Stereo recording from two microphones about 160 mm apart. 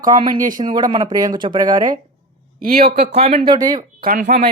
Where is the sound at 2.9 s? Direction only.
85° right.